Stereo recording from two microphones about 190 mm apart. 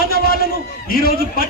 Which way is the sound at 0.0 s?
50° left (ahead or behind).